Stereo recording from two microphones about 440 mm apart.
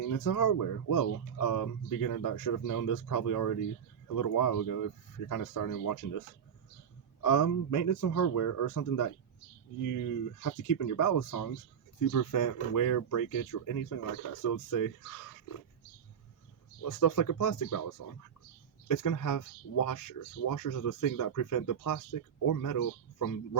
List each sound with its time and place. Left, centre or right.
0.1 s speech: left
7.2 s speech: left
16.9 s speech: left
18.9 s speech: left